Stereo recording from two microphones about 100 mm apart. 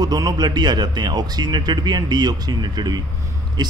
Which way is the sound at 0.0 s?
40° right (ahead or behind).